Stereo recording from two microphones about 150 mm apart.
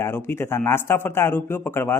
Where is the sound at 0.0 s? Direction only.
15° left (ahead or behind).